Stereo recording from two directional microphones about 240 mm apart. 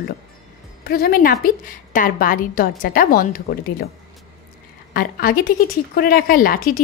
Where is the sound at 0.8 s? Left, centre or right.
Left.